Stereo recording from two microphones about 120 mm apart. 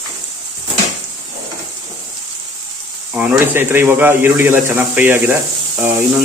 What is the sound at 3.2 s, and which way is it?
Speech, 15° right (ahead or behind).